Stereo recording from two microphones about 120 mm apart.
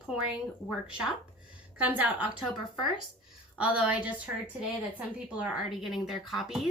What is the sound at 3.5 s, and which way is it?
Speech, 10° right (ahead or behind).